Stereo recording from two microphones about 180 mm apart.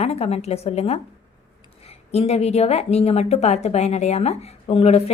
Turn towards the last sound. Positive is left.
turn(degrees=35)  # may be behind; listen again after turning